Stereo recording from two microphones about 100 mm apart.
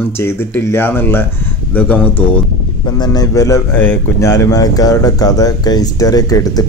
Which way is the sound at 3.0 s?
40° left (ahead or behind).